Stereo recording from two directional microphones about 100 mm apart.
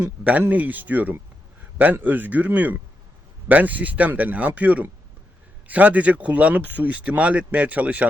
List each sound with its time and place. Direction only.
0.0 s speech: 15° right (ahead or behind)